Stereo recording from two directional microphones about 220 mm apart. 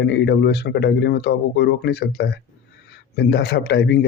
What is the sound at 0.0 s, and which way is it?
Speech, 55° left (ahead or behind).